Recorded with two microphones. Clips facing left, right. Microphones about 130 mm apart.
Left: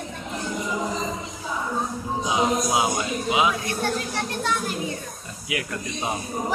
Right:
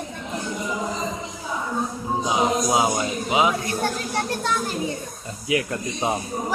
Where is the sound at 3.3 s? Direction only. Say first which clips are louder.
Right 2 dB; 30° right (ahead or behind).